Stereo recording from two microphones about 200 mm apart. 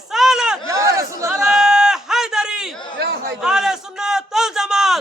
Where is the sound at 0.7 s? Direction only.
15° right (ahead or behind).